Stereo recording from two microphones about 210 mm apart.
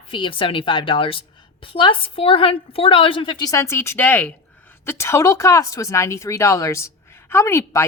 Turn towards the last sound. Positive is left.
turn(degrees=15)  # may be behind; listen again after turning